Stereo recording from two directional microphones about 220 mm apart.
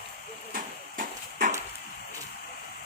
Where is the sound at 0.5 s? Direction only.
35° right (ahead or behind).